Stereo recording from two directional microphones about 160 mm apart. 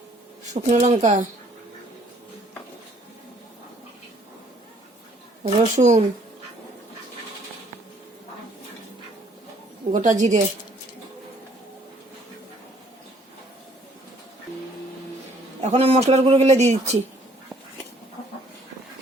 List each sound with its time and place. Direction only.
0.5 s a man's voice: 45° right (ahead or behind)
5.4 s a man's voice: 50° right (ahead or behind)
9.9 s a man's voice: 50° right (ahead or behind)
15.6 s a man's voice: 45° right (ahead or behind)